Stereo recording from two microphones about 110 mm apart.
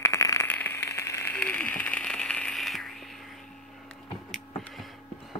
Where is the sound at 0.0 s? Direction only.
30° left (ahead or behind).